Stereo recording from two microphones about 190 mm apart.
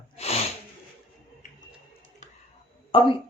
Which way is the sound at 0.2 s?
30° left (ahead or behind).